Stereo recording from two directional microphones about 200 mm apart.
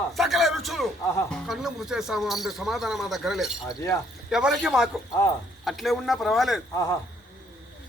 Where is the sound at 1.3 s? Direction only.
Centre (ahead or behind).